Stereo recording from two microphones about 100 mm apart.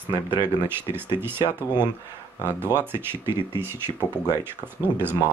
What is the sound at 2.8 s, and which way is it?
Speech, 20° right (ahead or behind).